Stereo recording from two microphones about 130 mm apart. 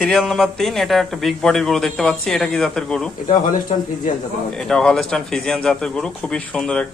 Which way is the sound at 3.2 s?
90° left.